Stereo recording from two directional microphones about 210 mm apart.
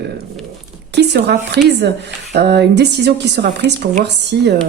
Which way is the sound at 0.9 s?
55° right (ahead or behind).